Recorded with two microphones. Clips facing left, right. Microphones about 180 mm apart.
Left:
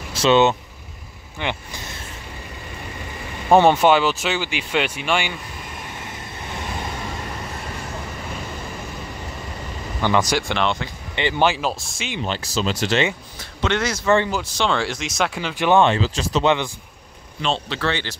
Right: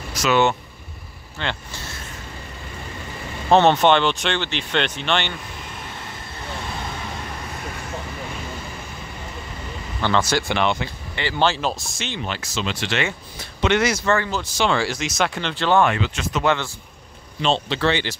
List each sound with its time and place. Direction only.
0.1 s speech: 25° left (ahead or behind)
3.4 s speech: 10° left (ahead or behind)
10.0 s speech: 15° left (ahead or behind)
10.5 s speech: 10° right (ahead or behind)
11.1 s speech: 15° left (ahead or behind)
12.3 s speech: 35° left (ahead or behind)
13.6 s speech: 10° right (ahead or behind)
15.3 s speech: 10° left (ahead or behind)
15.8 s speech: 30° left (ahead or behind)
16.4 s speech: 15° left (ahead or behind)
17.4 s a man's voice: 25° right (ahead or behind)